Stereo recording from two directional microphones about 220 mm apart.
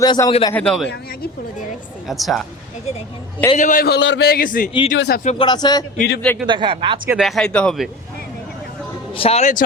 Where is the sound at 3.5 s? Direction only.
35° left (ahead or behind).